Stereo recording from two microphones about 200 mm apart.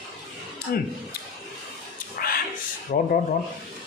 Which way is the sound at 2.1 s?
50° left (ahead or behind).